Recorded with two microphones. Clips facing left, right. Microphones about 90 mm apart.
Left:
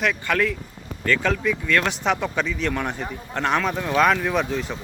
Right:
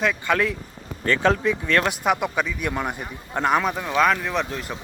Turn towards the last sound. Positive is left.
turn(degrees=0)  # may be behind; listen again after turning